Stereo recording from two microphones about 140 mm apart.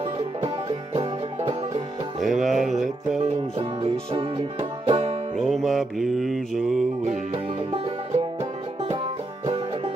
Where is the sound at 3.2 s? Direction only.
45° right (ahead or behind).